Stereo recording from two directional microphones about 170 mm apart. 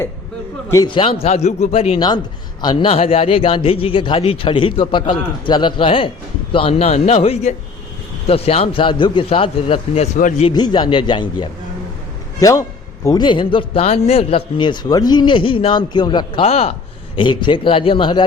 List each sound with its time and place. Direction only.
0.7 s speech: 25° left (ahead or behind)
2.0 s a man's voice: 25° left (ahead or behind)
10.2 s speech: 50° left (ahead or behind)
10.4 s a man's voice: 25° left (ahead or behind)